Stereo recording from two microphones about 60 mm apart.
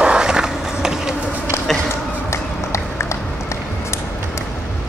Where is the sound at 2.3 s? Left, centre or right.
Left.